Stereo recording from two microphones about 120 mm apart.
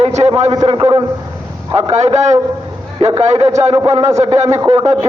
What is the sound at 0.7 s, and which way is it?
Speech, 50° right (ahead or behind).